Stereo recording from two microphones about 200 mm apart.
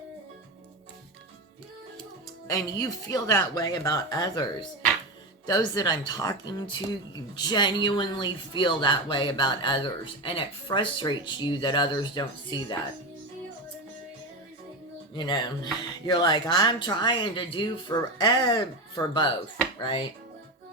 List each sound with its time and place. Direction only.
2.5 s speech: 20° left (ahead or behind)
5.5 s speech: 20° left (ahead or behind)
15.1 s speech: 20° left (ahead or behind)